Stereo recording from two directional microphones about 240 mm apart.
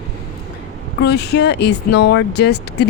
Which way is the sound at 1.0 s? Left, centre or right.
Left.